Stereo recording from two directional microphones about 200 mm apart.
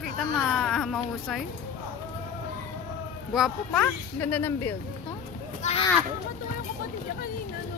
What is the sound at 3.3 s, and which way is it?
Speech, centre (ahead or behind).